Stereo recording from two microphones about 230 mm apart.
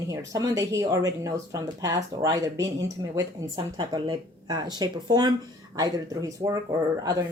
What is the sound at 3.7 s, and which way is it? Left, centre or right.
Speech, centre.